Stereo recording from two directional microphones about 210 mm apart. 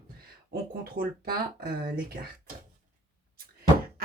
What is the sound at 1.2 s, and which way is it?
Speech, 45° right (ahead or behind).